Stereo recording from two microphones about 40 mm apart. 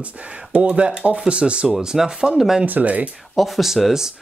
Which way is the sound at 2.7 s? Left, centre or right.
Right.